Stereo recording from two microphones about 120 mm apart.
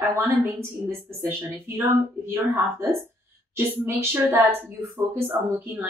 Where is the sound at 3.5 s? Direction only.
20° right (ahead or behind).